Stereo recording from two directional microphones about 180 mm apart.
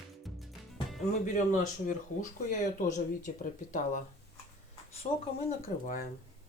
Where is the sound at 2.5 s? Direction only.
45° left (ahead or behind).